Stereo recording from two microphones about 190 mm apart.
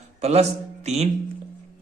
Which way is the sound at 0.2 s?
35° right (ahead or behind).